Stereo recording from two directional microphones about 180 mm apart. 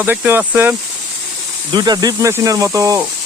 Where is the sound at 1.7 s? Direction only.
25° right (ahead or behind).